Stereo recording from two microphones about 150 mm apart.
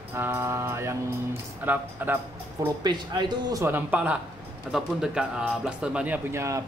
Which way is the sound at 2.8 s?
30° right (ahead or behind).